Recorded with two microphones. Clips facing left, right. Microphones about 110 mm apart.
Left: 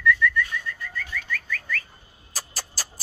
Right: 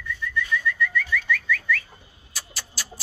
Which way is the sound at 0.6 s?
40° left (ahead or behind).